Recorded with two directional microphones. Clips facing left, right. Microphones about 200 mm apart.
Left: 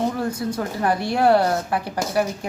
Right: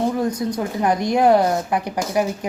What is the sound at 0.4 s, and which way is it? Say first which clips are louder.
Speech: right 2 dB; 20° right (ahead or behind).